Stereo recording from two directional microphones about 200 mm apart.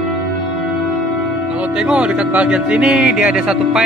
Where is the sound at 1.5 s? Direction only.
5° right (ahead or behind).